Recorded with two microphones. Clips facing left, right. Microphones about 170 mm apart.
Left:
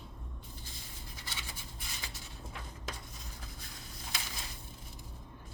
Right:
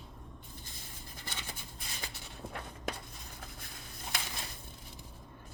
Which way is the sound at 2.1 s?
60° right (ahead or behind).